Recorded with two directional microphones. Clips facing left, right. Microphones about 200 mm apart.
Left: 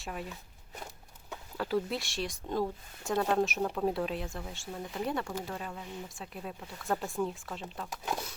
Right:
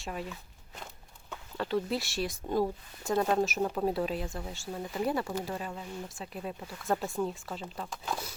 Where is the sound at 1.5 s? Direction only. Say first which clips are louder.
Right 1 dB; centre (ahead or behind).